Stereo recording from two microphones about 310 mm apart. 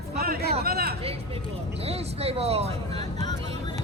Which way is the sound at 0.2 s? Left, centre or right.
Right.